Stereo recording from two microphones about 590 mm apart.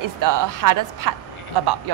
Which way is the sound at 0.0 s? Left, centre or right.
Right.